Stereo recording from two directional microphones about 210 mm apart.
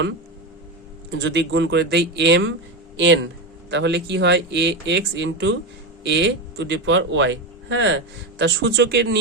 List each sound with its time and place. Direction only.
1.1 s a man's voice: 55° right (ahead or behind)
3.7 s a man's voice: 55° right (ahead or behind)